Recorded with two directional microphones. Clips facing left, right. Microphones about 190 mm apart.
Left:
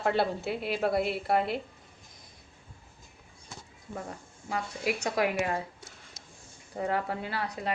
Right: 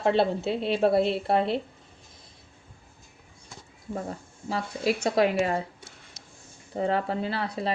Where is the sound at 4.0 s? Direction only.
30° right (ahead or behind).